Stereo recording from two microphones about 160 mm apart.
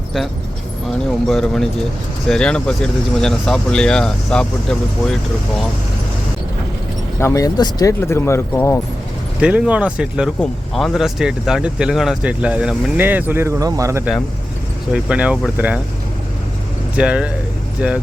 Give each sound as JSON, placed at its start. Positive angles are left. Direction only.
{"t": 1.3, "sound": "speech", "side_deg": 5}
{"t": 7.2, "sound": "speech", "side_deg": 20}
{"t": 9.4, "sound": "speech", "side_deg": -10}
{"t": 17.0, "sound": "speech", "side_deg": -5}